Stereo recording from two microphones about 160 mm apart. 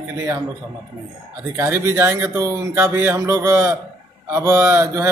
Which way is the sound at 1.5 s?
15° right (ahead or behind).